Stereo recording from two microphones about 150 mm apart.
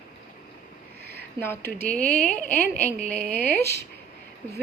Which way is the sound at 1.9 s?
75° right (ahead or behind).